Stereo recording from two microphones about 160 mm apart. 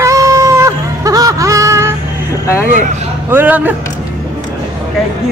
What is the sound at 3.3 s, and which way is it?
Speech, 10° right (ahead or behind).